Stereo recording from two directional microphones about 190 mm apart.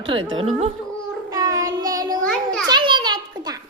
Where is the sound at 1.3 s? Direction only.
20° right (ahead or behind).